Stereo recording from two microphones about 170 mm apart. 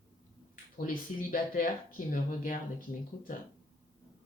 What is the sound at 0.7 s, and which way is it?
Speech, 55° left (ahead or behind).